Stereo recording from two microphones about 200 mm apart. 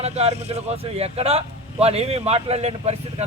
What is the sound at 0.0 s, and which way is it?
A man's voice, 30° right (ahead or behind).